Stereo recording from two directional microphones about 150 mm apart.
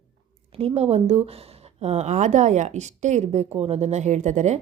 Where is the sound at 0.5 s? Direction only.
40° right (ahead or behind).